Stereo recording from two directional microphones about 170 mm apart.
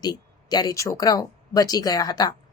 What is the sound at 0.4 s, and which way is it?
Speech, 25° left (ahead or behind).